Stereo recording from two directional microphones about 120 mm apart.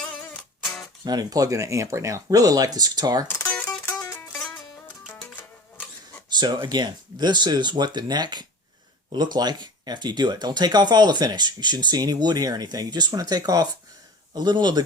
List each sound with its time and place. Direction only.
0.6 s music: centre (ahead or behind)
1.0 s speech: 35° right (ahead or behind)
3.2 s mandolin: 20° left (ahead or behind)
6.3 s speech: 40° right (ahead or behind)